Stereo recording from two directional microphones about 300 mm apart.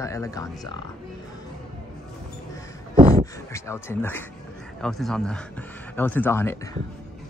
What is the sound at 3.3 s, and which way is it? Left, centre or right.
A man's voice, centre.